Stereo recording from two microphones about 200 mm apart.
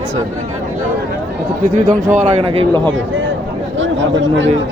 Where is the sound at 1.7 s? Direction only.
40° right (ahead or behind).